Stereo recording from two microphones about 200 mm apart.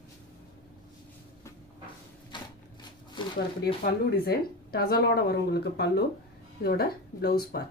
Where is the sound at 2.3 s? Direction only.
20° left (ahead or behind).